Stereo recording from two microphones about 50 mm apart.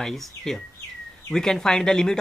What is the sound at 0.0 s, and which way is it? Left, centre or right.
Speech, centre.